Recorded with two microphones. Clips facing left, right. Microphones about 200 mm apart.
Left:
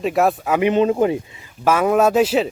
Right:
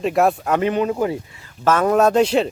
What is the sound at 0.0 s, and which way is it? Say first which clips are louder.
Speech: even; centre (ahead or behind).